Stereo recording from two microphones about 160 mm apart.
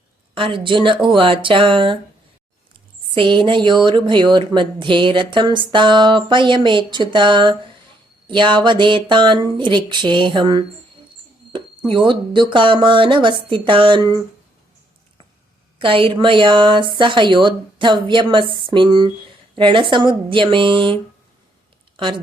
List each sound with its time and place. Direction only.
0.3 s a woman's voice: 30° right (ahead or behind)
3.2 s speech: 30° right (ahead or behind)
11.9 s a woman's voice: 30° right (ahead or behind)
15.8 s a woman's voice: 30° right (ahead or behind)